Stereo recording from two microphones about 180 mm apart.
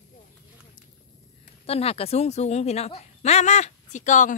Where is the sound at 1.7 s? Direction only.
35° left (ahead or behind).